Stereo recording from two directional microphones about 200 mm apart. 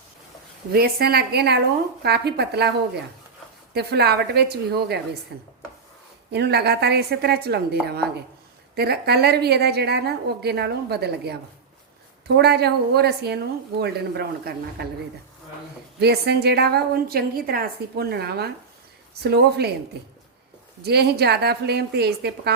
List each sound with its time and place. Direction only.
0.7 s a woman's voice: 50° right (ahead or behind)
3.8 s a woman's voice: 55° right (ahead or behind)
12.4 s a woman's voice: 55° right (ahead or behind)
16.0 s a woman's voice: 55° right (ahead or behind)
20.8 s a woman's voice: 55° right (ahead or behind)